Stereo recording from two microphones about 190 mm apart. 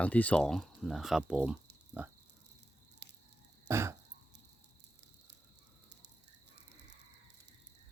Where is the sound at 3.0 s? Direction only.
65° right (ahead or behind).